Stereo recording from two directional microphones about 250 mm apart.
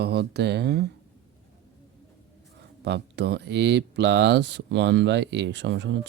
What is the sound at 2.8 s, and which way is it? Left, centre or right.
Speech, right.